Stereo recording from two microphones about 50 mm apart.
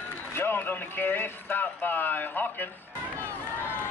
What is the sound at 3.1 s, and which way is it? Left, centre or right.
Run, left.